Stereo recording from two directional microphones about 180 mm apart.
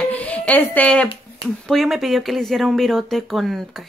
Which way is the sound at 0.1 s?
10° left (ahead or behind).